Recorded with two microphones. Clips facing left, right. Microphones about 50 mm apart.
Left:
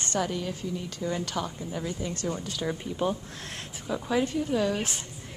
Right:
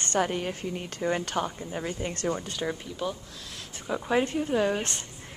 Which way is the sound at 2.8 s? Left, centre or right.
Centre.